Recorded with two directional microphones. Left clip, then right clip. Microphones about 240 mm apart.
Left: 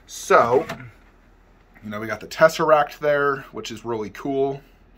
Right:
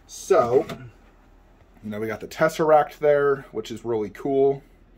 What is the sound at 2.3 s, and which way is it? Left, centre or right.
Speech, left.